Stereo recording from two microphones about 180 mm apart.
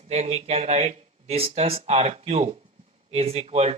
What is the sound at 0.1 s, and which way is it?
Speech, 35° right (ahead or behind).